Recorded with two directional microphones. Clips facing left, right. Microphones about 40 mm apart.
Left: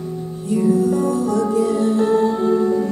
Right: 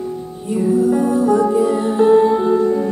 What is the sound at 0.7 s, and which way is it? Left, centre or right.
Music, right.